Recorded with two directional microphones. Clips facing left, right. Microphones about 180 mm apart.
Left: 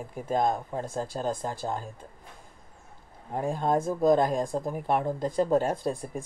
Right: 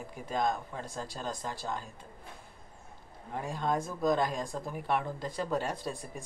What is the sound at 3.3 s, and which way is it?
Speech, 45° left (ahead or behind).